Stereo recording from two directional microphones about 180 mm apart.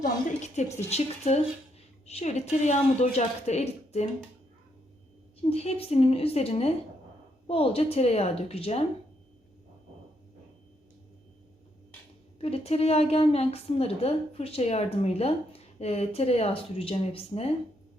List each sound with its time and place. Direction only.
0.0 s a woman's voice: 40° left (ahead or behind)
5.4 s a woman's voice: 35° left (ahead or behind)
12.4 s a woman's voice: 35° left (ahead or behind)